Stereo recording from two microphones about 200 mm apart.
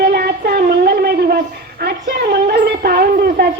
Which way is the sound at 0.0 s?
55° right (ahead or behind).